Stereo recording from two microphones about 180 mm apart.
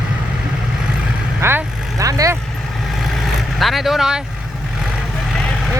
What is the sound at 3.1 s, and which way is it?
Vehicle, centre (ahead or behind).